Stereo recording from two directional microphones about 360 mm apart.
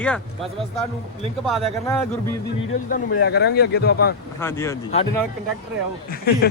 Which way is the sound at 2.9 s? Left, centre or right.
Left.